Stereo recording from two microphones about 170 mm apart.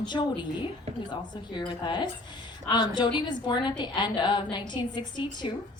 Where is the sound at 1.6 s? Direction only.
25° left (ahead or behind).